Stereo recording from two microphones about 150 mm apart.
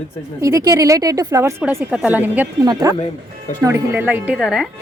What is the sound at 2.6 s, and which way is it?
Speech, 25° right (ahead or behind).